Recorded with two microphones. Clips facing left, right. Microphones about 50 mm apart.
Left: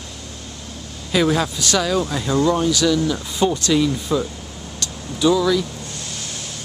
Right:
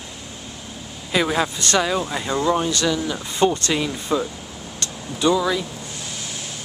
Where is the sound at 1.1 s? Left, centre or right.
Centre.